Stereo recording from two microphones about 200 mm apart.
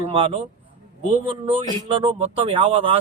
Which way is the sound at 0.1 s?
25° right (ahead or behind).